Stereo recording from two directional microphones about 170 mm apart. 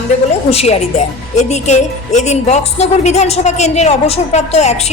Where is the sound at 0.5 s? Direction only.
40° left (ahead or behind).